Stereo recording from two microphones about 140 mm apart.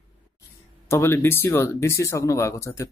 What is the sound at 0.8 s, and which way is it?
Speech, 20° left (ahead or behind).